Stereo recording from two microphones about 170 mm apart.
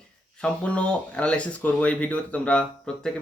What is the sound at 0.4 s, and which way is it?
Speech, 5° left (ahead or behind).